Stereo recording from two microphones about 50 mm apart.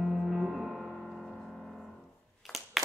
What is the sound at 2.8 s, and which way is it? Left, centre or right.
Clapping, centre.